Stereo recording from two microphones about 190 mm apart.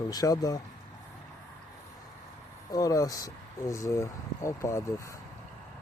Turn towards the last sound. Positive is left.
turn(degrees=15)  # may be behind; listen again after turning